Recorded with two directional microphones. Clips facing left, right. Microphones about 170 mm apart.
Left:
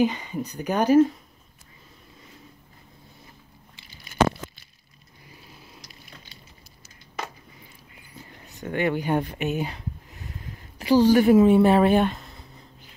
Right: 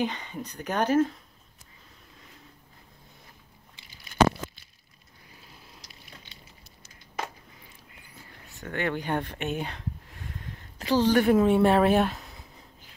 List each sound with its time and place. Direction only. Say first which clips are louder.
0.0 s speech: left 7 dB; 5° left (ahead or behind)
6.3 s a sound: left 2 dB; 35° left (ahead or behind)
8.5 s speech: left 5 dB; 15° left (ahead or behind); by 12.4 s centre (ahead or behind)